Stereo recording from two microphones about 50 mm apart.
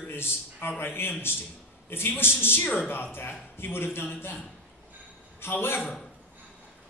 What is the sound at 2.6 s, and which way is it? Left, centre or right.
Speech, left.